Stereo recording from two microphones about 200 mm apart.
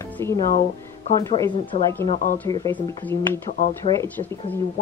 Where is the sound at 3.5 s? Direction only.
40° left (ahead or behind).